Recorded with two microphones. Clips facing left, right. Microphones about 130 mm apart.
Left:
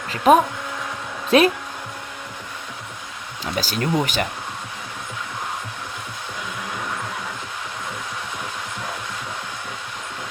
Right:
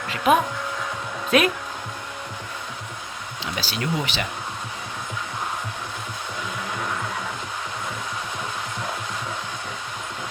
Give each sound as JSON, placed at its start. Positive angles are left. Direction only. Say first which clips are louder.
{"t": 0.3, "sound": "speech", "louder": "left 5 dB", "side_deg": 40}
{"t": 3.4, "sound": "speech", "louder": "left 4 dB", "side_deg": 45}